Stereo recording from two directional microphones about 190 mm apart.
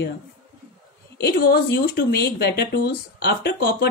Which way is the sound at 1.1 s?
60° left (ahead or behind).